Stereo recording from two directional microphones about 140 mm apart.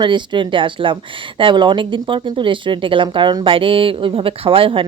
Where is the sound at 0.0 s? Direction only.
35° right (ahead or behind).